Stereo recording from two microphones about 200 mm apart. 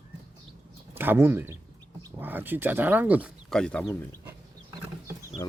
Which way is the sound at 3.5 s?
5° left (ahead or behind).